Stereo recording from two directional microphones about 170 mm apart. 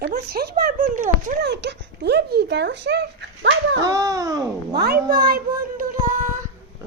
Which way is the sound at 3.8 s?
20° right (ahead or behind).